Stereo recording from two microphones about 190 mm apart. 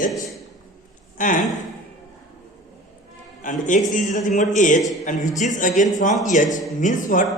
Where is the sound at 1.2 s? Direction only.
45° left (ahead or behind).